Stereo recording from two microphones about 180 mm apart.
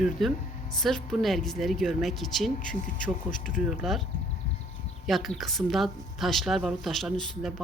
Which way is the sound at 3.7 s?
Centre (ahead or behind).